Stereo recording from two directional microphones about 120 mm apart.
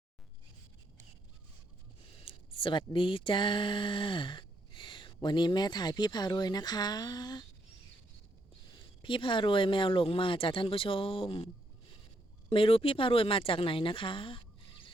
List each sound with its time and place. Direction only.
2.2 s speech: 45° left (ahead or behind)
9.0 s speech: 45° left (ahead or behind)
12.5 s a woman's voice: 50° left (ahead or behind)